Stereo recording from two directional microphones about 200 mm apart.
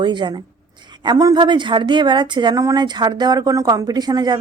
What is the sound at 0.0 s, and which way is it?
A woman's voice, 20° right (ahead or behind).